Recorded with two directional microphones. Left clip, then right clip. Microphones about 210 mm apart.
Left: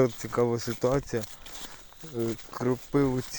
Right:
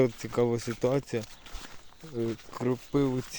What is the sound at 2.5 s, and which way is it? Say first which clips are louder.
Speech: left 3 dB; centre (ahead or behind).